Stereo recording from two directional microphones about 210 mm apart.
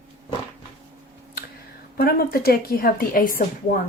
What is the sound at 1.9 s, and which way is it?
A woman's voice, 45° left (ahead or behind).